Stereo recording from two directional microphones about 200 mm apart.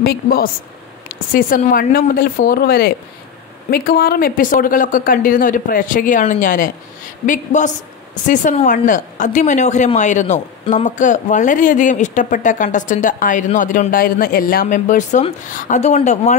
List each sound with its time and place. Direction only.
0.0 s a woman's voice: 45° left (ahead or behind)